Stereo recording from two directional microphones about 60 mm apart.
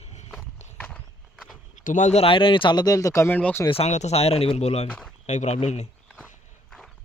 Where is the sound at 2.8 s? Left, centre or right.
Left.